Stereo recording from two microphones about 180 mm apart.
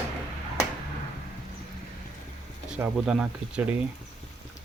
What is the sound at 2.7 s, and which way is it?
Speech, 5° right (ahead or behind).